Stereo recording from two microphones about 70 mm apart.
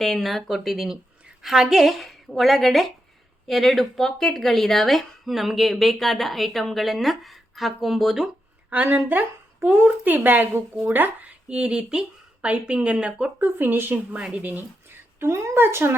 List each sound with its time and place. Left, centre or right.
0.0 s speech: centre
8.7 s a woman's voice: right
13.4 s a woman's voice: right
14.2 s speech: centre
15.2 s a woman's voice: right